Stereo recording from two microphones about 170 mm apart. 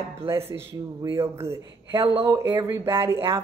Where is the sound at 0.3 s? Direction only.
15° right (ahead or behind).